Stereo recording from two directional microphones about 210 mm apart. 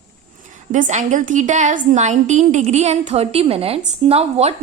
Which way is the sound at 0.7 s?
35° right (ahead or behind).